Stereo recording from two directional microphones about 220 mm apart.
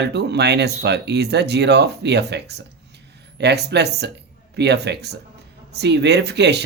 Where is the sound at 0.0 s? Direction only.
50° right (ahead or behind).